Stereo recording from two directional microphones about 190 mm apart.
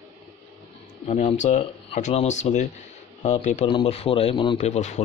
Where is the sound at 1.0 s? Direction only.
35° left (ahead or behind).